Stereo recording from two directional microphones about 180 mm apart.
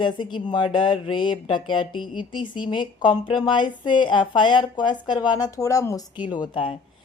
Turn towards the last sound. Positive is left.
turn(degrees=25)  # may be behind; listen again after turning